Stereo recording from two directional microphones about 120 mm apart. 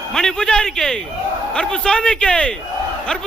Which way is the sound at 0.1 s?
5° left (ahead or behind).